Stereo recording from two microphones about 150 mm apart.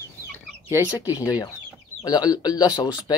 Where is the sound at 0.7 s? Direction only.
20° left (ahead or behind).